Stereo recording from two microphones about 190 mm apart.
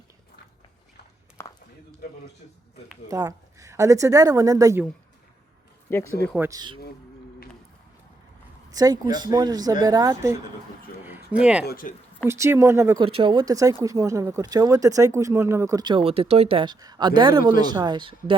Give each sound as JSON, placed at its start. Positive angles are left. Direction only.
{"t": 1.4, "sound": "a sound", "side_deg": 15}
{"t": 3.1, "sound": "speech", "side_deg": -20}
{"t": 5.9, "sound": "speech", "side_deg": 10}
{"t": 6.5, "sound": "speech", "side_deg": -20}
{"t": 8.7, "sound": "speech", "side_deg": -20}
{"t": 11.0, "sound": "a sound", "side_deg": -10}
{"t": 11.6, "sound": "speech", "side_deg": 50}
{"t": 12.2, "sound": "speech", "side_deg": -15}
{"t": 13.1, "sound": "speech", "side_deg": -25}